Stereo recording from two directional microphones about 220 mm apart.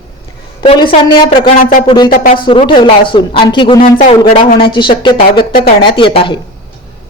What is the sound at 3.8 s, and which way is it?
Speech, 35° left (ahead or behind).